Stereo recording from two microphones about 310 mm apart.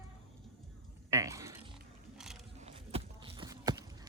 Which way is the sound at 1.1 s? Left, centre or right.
Centre.